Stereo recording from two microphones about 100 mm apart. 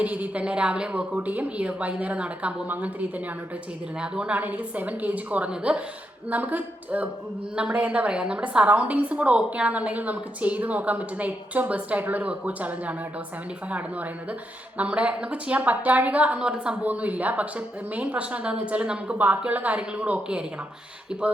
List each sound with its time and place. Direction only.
0.0 s a woman's voice: 15° right (ahead or behind)